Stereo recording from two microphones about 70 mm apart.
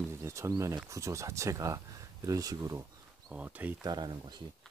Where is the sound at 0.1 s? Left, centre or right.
Right.